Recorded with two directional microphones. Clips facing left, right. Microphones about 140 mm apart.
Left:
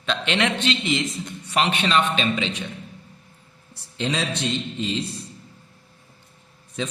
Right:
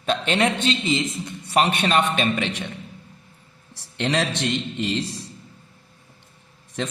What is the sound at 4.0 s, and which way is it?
Speech, 65° right (ahead or behind).